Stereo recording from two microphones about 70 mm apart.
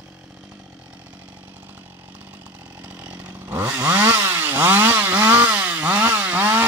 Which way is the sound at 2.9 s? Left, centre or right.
Right.